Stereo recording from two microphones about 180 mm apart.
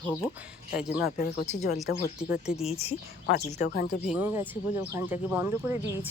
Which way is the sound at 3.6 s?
60° left (ahead or behind).